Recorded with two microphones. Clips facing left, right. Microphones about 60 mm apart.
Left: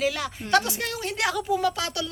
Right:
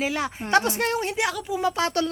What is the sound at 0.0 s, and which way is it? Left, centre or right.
Speech, right.